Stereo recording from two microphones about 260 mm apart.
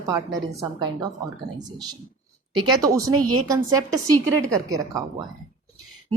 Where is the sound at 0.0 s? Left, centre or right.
Centre.